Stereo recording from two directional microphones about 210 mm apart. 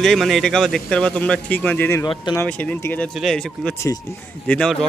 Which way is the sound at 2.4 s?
5° left (ahead or behind).